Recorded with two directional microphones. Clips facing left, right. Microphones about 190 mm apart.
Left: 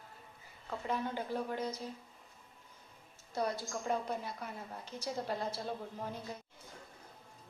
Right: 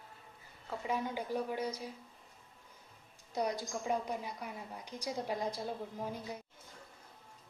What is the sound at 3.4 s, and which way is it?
A woman's voice, 15° right (ahead or behind).